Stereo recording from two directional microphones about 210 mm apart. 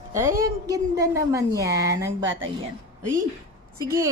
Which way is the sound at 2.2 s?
65° right (ahead or behind).